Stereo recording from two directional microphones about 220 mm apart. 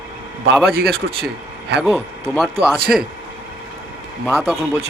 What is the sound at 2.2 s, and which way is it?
Speech, centre (ahead or behind).